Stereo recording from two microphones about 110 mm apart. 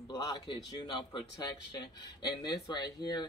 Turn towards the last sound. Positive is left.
turn(degrees=35)  # may be behind; listen again after turning